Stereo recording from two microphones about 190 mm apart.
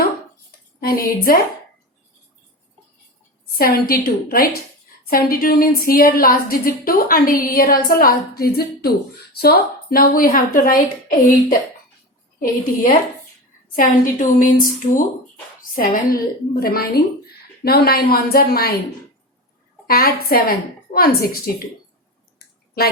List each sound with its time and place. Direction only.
0.8 s speech: 50° left (ahead or behind)
3.6 s speech: 50° left (ahead or behind)
19.9 s speech: 50° left (ahead or behind)